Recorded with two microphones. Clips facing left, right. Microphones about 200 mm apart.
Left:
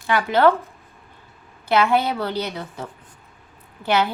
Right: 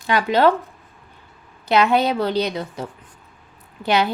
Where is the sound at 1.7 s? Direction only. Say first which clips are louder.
Right 2 dB; 20° right (ahead or behind).